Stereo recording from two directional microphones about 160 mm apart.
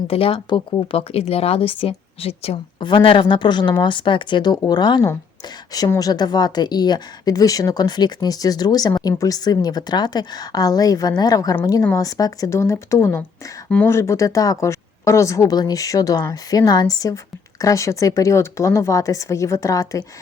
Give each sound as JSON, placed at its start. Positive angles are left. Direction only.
{"t": 0.1, "sound": "speech", "side_deg": 35}